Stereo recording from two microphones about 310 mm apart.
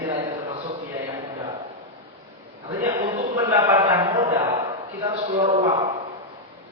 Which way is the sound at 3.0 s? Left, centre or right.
Centre.